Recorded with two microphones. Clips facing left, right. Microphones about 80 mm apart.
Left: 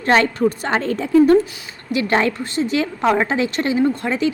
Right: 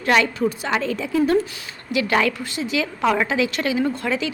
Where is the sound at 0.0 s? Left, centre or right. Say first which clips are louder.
Left 3 dB; left.